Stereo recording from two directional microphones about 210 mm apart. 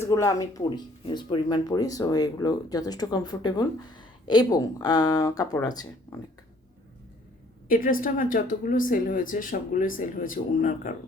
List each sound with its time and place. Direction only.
0.0 s speech: 15° left (ahead or behind)
7.7 s speech: 40° left (ahead or behind)